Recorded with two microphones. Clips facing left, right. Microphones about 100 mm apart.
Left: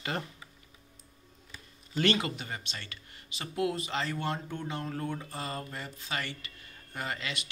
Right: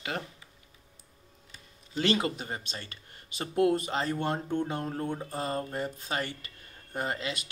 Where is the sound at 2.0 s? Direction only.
30° right (ahead or behind).